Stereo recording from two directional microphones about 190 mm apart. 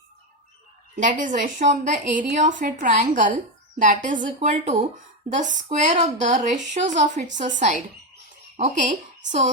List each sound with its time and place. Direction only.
0.9 s a woman's voice: 40° right (ahead or behind)